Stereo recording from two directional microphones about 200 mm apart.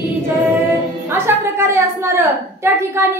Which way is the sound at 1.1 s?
15° right (ahead or behind).